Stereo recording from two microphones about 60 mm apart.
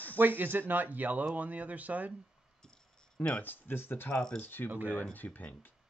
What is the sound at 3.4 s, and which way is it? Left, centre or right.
Speech, left.